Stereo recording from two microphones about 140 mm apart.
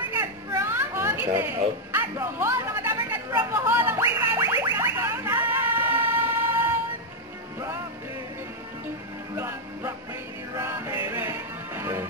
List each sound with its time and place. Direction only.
0.6 s music: 15° right (ahead or behind)
3.3 s a sound: 15° right (ahead or behind)
9.3 s music: 15° right (ahead or behind)